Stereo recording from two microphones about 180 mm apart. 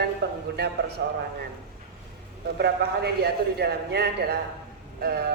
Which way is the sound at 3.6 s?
65° right (ahead or behind).